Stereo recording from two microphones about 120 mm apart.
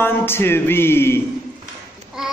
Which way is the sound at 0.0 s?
20° left (ahead or behind).